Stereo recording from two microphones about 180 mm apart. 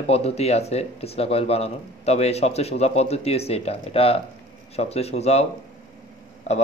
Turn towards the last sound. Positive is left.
turn(degrees=40)  # may be behind; listen again after turning